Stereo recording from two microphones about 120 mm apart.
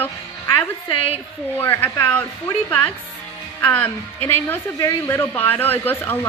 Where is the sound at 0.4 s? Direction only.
45° left (ahead or behind).